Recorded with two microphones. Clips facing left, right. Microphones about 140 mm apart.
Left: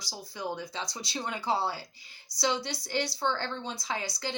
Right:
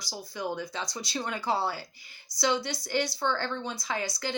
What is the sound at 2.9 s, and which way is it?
Speech, 25° left (ahead or behind).